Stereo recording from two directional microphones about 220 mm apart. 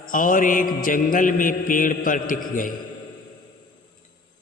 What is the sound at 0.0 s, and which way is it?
Mantra, 40° left (ahead or behind).